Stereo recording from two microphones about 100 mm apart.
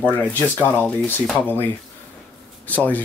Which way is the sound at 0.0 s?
15° left (ahead or behind).